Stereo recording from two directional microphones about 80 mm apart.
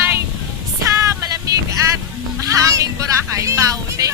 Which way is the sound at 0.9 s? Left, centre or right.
Right.